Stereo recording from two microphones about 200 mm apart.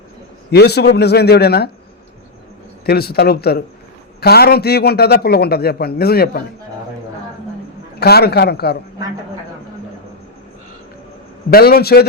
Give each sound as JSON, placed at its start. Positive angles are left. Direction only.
{"t": 0.5, "sound": "a man's voice", "side_deg": 55}
{"t": 2.8, "sound": "a man's voice", "side_deg": 50}
{"t": 7.9, "sound": "a man's voice", "side_deg": 50}
{"t": 11.5, "sound": "a man's voice", "side_deg": 50}